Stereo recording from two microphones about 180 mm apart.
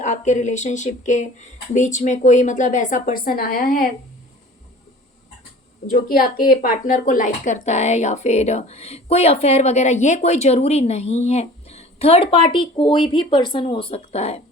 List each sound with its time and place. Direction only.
0.0 s speech: 40° left (ahead or behind)
5.9 s speech: 55° left (ahead or behind); by 14.4 s 35° left (ahead or behind)